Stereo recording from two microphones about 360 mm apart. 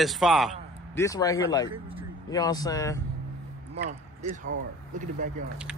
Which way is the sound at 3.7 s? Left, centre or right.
Centre.